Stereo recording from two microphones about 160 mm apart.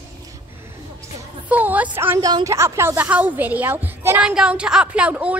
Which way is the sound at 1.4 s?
10° right (ahead or behind).